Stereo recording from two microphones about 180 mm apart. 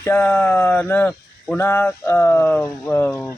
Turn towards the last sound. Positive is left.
turn(degrees=15)  # may be behind; listen again after turning